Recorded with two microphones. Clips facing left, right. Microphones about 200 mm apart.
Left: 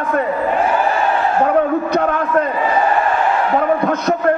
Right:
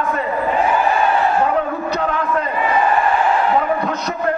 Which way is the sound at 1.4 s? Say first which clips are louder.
Left 4 dB; 55° left (ahead or behind).